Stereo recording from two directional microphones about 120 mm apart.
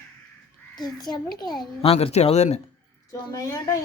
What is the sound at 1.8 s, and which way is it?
Speech, 50° left (ahead or behind).